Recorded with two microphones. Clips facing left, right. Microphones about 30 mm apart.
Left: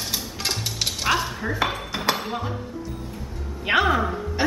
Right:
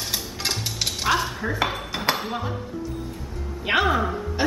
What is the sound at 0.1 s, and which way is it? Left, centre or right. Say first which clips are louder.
Dishes: even; centre.